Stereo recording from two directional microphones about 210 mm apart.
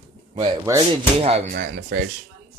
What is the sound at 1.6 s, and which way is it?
Speech, 50° right (ahead or behind).